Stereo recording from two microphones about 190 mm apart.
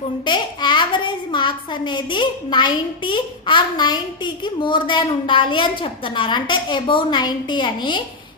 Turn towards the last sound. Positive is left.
turn(degrees=25)  # may be behind; listen again after turning